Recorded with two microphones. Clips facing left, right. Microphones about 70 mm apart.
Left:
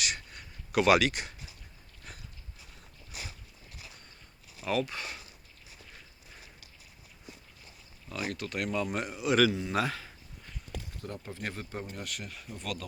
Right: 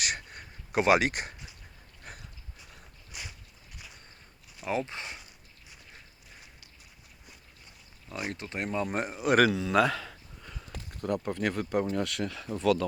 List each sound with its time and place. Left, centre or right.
0.0 s a sound: right
0.7 s speech: right
2.0 s a sound: right
4.6 s speech: right
8.1 s speech: right
9.7 s speech: right
11.0 s speech: right